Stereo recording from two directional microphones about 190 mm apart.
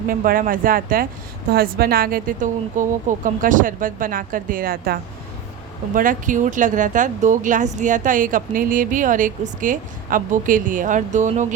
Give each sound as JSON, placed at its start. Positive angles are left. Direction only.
{"t": 0.1, "sound": "speech", "side_deg": -45}